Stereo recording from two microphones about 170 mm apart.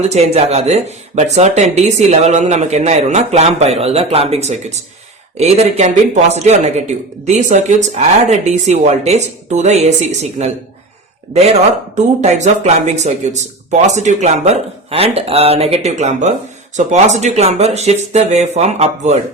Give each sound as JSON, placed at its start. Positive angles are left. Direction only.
{"t": 0.0, "sound": "speech", "side_deg": -40}
{"t": 11.9, "sound": "speech", "side_deg": -45}